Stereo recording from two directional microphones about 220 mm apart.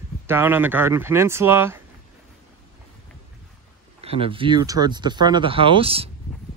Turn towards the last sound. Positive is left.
turn(degrees=-25)  # may be behind; listen again after turning